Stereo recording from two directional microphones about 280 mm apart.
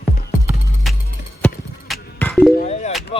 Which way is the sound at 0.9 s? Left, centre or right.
Centre.